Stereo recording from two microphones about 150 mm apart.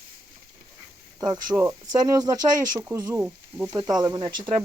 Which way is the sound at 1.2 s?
20° right (ahead or behind).